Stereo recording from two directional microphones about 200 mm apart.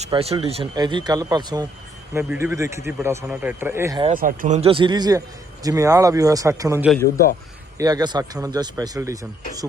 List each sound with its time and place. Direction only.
0.0 s speech: 30° right (ahead or behind); by 4.0 s 15° right (ahead or behind)
4.1 s speech: 45° right (ahead or behind); by 9.1 s 15° right (ahead or behind)